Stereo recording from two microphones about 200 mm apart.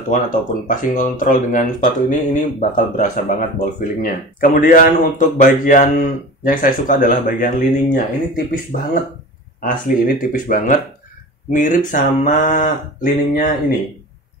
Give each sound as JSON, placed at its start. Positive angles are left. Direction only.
{"t": 0.1, "sound": "speech", "side_deg": 40}
{"t": 9.6, "sound": "speech", "side_deg": 40}